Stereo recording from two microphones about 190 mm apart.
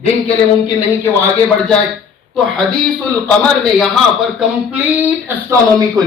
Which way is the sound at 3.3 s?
5° left (ahead or behind).